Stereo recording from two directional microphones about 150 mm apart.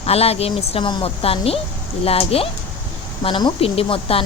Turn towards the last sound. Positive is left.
turn(degrees=40)  # may be behind; listen again after turning